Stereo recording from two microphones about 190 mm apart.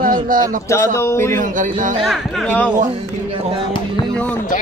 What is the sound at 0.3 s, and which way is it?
Speech, 45° right (ahead or behind).